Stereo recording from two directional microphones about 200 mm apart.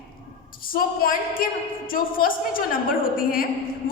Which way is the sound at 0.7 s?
45° left (ahead or behind).